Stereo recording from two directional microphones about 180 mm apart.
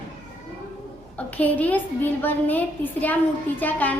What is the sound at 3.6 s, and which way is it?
Speech, 10° left (ahead or behind).